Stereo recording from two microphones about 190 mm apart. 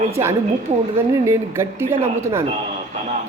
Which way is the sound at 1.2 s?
15° right (ahead or behind).